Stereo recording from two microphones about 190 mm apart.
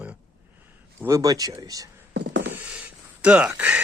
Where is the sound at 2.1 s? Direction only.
65° right (ahead or behind).